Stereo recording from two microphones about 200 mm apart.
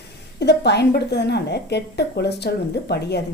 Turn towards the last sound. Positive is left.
turn(degrees=55)  # may be behind; listen again after turning